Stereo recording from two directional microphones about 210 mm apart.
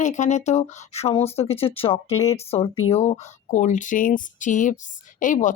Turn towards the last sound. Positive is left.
turn(degrees=35)  # may be behind; listen again after turning